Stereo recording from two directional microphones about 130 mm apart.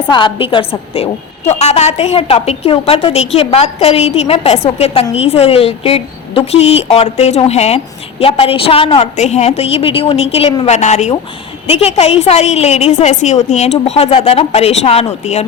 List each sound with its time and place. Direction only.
0.1 s a woman's voice: 40° left (ahead or behind); by 11.1 s 65° left (ahead or behind)
11.6 s a woman's voice: 50° left (ahead or behind)